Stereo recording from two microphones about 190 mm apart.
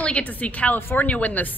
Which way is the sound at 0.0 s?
5° left (ahead or behind).